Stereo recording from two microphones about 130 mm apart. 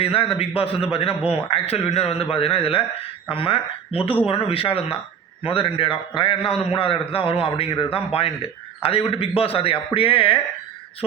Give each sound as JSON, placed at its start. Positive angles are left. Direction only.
{"t": 0.0, "sound": "a man's voice", "side_deg": 45}